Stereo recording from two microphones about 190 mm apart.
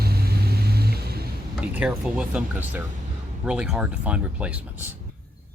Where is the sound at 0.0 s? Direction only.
55° right (ahead or behind).